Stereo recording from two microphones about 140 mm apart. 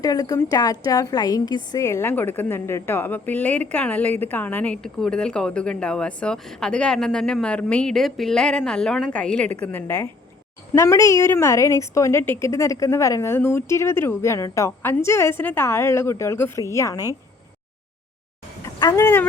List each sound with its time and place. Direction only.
0.0 s a woman's voice: 25° left (ahead or behind)
18.6 s a sound: 30° left (ahead or behind)
18.9 s a woman's voice: 15° left (ahead or behind)